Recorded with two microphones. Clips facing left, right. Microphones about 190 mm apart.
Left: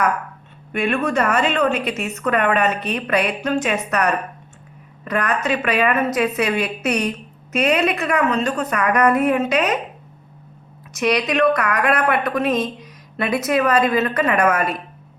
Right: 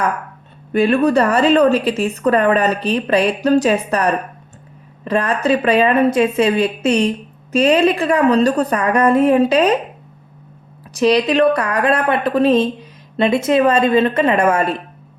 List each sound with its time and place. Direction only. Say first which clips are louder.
0.7 s a woman's voice: right 7 dB; 35° right (ahead or behind)
10.9 s a woman's voice: right 5 dB; 30° right (ahead or behind)